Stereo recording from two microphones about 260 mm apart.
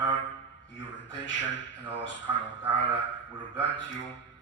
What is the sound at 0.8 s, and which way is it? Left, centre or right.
A man's voice, left.